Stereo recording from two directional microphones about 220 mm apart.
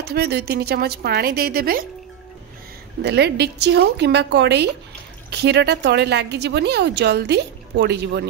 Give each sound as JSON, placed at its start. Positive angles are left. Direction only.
{"t": 0.0, "sound": "a woman's voice", "side_deg": -45}
{"t": 3.0, "sound": "a woman's voice", "side_deg": -50}